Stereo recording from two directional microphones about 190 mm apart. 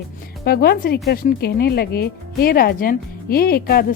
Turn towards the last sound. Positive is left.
turn(degrees=55)  # may be behind; listen again after turning